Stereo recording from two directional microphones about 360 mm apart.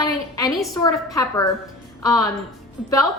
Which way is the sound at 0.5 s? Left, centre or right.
Centre.